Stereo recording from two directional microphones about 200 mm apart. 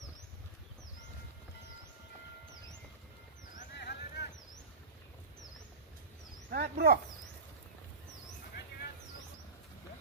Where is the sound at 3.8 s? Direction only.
55° left (ahead or behind).